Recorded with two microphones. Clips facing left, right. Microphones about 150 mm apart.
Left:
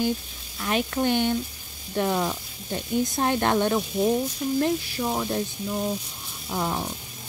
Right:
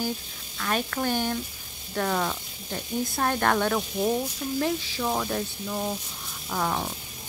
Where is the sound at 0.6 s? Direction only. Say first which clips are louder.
Left 3 dB; 20° left (ahead or behind).